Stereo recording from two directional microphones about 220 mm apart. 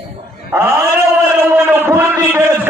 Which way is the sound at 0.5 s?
20° right (ahead or behind).